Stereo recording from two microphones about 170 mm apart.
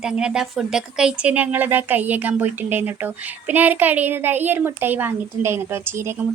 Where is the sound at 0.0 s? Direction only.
5° right (ahead or behind).